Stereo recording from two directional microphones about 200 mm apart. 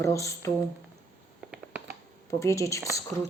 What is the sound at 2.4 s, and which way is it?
Speech, 15° left (ahead or behind).